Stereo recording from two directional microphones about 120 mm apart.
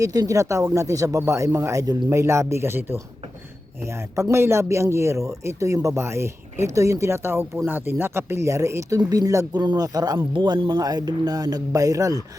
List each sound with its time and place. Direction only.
0.0 s speech: 30° right (ahead or behind)
4.1 s speech: 25° right (ahead or behind)